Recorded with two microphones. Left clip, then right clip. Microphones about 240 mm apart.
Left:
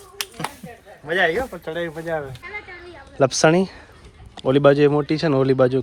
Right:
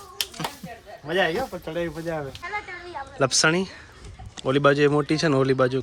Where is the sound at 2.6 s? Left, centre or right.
Right.